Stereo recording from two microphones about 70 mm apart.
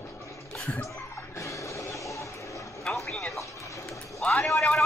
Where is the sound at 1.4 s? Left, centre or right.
Left.